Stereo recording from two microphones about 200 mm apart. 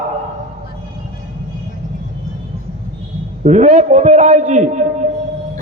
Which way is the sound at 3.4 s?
35° right (ahead or behind).